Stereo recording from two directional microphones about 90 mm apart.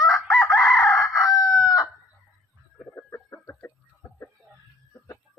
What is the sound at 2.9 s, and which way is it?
Chicken, 30° left (ahead or behind).